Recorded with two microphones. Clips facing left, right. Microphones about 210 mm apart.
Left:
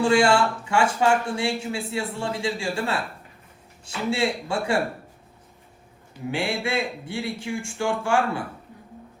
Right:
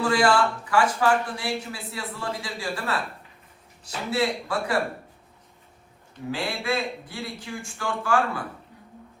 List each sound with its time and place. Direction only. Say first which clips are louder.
0.0 s speech: left 2 dB; 25° left (ahead or behind)
6.3 s speech: left 2 dB; 25° left (ahead or behind)